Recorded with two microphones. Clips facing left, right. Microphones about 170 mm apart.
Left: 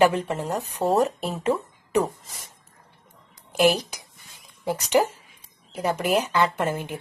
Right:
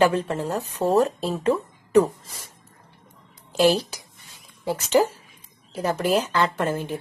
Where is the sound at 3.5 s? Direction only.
15° left (ahead or behind).